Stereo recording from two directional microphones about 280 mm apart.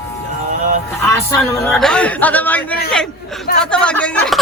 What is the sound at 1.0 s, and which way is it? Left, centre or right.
A man's voice, centre.